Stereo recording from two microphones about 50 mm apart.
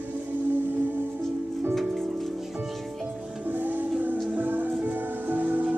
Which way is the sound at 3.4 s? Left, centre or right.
Right.